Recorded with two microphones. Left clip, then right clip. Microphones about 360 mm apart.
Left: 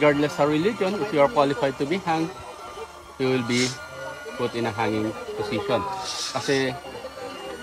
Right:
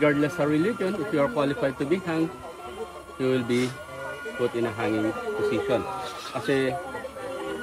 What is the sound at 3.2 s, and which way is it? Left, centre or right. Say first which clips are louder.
Speech: left 1 dB; left.